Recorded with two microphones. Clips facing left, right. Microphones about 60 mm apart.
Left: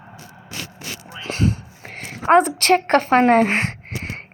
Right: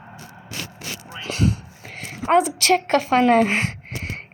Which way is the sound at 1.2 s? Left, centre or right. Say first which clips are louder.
Left 1 dB; left.